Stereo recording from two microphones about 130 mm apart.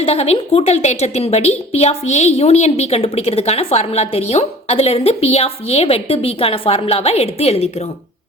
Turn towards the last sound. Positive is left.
turn(degrees=55)  # may be behind; listen again after turning